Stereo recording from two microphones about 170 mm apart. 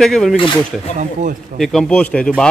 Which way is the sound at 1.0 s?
45° right (ahead or behind).